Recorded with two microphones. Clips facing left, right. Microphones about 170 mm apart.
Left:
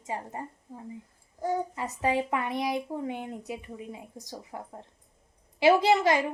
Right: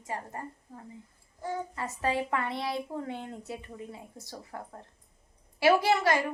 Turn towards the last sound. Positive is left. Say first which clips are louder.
# left 3 dB
turn(degrees=20)  # may be behind; listen again after turning